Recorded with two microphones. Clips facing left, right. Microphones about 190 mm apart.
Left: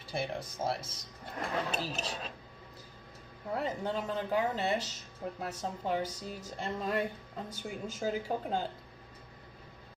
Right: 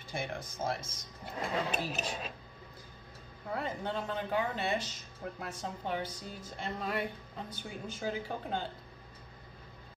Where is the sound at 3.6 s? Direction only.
40° left (ahead or behind).